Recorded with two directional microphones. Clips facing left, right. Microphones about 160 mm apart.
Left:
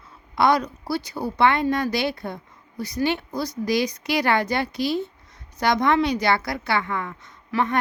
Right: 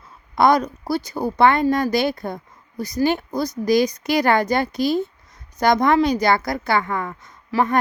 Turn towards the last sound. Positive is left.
turn(degrees=-40)  # may be behind; listen again after turning